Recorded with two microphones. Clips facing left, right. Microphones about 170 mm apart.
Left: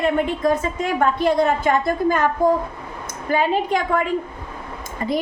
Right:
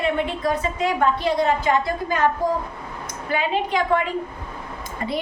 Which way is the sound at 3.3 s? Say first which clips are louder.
Left 4 dB; 45° left (ahead or behind).